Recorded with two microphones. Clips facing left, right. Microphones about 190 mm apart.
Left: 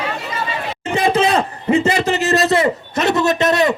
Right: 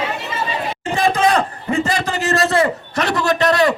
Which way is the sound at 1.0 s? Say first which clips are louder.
Even; 20° left (ahead or behind).